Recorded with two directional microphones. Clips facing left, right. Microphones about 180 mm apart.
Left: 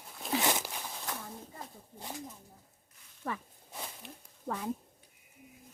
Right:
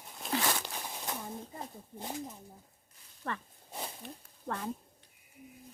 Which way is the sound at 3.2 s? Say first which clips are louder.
Left 1 dB; 10° left (ahead or behind).